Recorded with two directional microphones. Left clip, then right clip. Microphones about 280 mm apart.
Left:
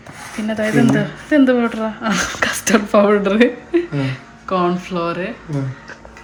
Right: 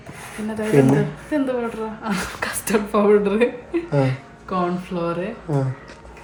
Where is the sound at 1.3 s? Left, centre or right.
Left.